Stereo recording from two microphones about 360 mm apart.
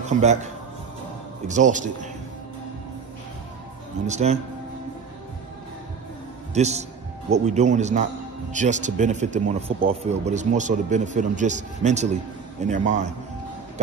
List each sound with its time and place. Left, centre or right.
0.2 s speech: centre
1.5 s speech: right
4.1 s speech: centre
6.5 s a man's voice: centre